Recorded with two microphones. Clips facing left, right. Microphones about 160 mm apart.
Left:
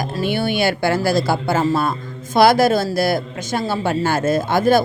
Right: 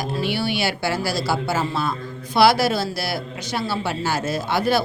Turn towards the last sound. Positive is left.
turn(degrees=50)  # may be behind; listen again after turning